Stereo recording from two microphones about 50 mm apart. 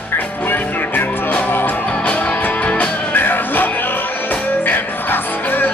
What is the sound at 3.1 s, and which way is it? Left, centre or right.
Music, left.